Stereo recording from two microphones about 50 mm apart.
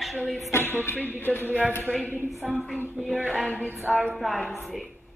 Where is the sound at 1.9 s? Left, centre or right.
Right.